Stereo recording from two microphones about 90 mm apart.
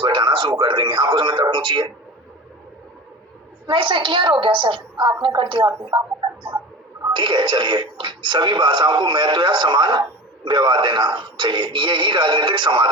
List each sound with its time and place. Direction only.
0.0 s radio: 65° right (ahead or behind)
0.6 s speech: 60° right (ahead or behind)
3.7 s speech: 65° right (ahead or behind)